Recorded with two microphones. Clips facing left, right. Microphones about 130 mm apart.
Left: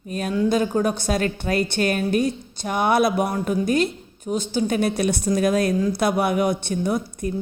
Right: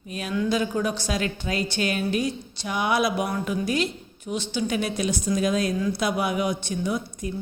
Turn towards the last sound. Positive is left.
turn(degrees=50)  # may be behind; listen again after turning